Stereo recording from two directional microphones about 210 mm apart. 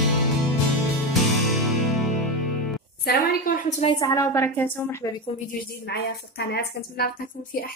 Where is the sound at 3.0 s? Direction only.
40° left (ahead or behind).